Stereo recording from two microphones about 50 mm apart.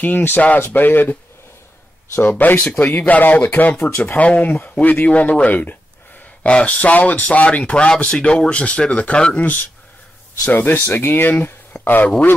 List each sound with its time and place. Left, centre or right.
0.0 s a man's voice: left
2.2 s a man's voice: left
6.4 s a man's voice: left